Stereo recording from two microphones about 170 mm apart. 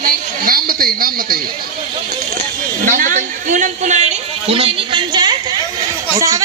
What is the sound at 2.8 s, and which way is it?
Music, 50° right (ahead or behind).